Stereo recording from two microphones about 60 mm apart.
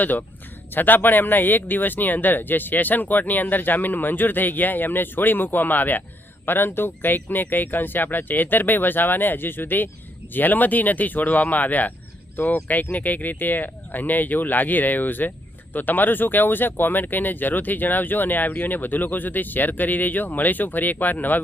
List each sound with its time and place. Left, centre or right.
0.0 s speech: left